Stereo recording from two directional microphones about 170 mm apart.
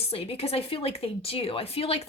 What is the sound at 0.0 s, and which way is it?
Speech, 35° left (ahead or behind).